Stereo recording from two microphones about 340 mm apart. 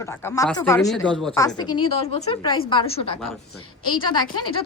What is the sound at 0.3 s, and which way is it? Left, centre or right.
Speech, centre.